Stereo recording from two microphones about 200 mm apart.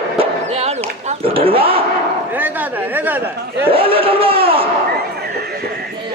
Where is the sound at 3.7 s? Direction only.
25° right (ahead or behind).